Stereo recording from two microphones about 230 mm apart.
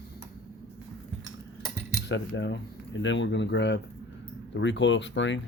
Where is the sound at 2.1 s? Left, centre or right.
Left.